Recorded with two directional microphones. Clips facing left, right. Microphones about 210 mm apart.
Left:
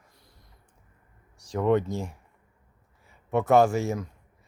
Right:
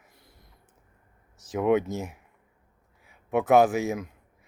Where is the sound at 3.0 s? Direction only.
Centre (ahead or behind).